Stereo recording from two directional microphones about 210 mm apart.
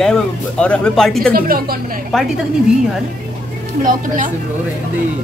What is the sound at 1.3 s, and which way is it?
Speech, 45° right (ahead or behind).